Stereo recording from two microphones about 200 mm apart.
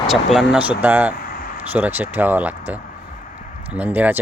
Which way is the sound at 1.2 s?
45° left (ahead or behind).